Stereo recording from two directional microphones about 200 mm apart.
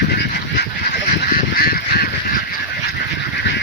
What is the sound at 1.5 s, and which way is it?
Goose, 50° left (ahead or behind).